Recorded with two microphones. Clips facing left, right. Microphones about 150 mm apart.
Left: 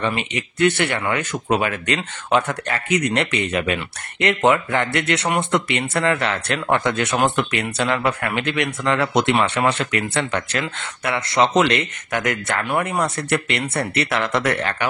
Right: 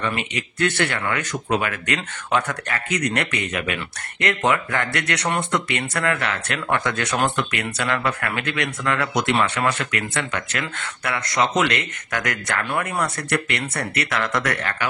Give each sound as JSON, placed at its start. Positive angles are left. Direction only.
{"t": 0.0, "sound": "speech", "side_deg": 25}